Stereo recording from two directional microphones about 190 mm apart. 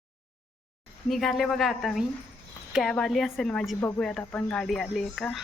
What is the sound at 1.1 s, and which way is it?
A woman's voice, centre (ahead or behind).